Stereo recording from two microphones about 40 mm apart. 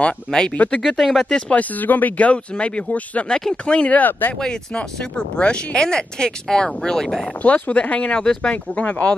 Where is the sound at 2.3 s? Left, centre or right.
Left.